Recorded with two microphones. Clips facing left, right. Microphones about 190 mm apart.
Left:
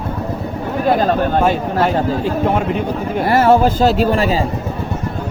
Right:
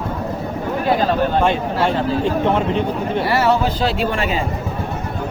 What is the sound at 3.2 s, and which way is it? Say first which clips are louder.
Speech: left 6 dB; 50° left (ahead or behind).